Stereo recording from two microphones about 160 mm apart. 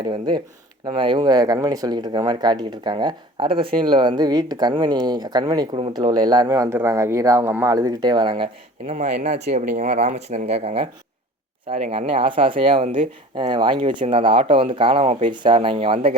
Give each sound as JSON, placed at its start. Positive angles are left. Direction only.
{"t": 0.0, "sound": "speech", "side_deg": -30}
{"t": 9.0, "sound": "speech", "side_deg": -45}